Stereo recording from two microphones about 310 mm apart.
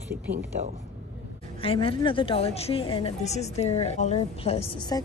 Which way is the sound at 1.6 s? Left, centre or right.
Centre.